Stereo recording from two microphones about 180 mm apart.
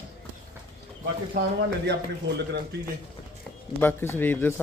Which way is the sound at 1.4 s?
55° right (ahead or behind).